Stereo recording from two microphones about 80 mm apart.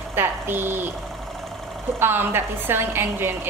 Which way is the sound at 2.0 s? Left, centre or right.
Right.